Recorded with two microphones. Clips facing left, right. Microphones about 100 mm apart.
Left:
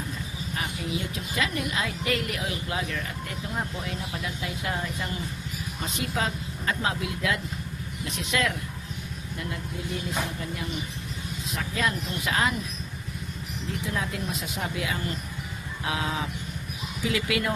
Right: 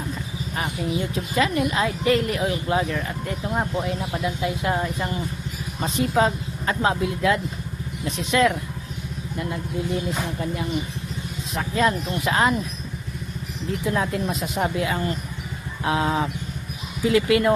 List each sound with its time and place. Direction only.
0.5 s speech: 35° right (ahead or behind)
3.5 s speech: 45° right (ahead or behind)
11.5 s speech: 35° right (ahead or behind)
13.9 s speech: 45° right (ahead or behind)